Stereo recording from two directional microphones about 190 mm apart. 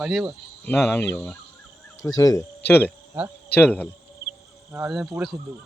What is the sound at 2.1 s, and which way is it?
Speech, 15° left (ahead or behind).